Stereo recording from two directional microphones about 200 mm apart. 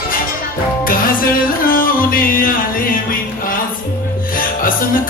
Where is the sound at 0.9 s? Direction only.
45° left (ahead or behind).